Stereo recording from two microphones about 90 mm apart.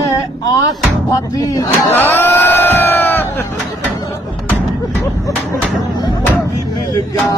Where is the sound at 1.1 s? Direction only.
40° left (ahead or behind).